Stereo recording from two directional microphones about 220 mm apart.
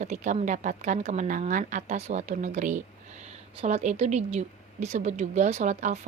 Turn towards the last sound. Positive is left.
turn(degrees=-30)  # may be behind; listen again after turning